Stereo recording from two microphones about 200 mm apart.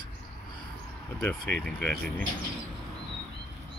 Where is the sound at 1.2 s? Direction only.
10° left (ahead or behind).